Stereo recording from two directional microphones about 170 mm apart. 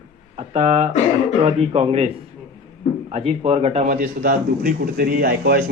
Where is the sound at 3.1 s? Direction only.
35° right (ahead or behind).